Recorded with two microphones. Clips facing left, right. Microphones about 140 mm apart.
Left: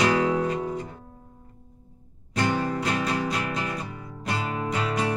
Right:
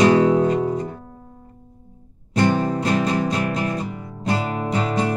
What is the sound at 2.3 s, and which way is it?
Music, 25° right (ahead or behind).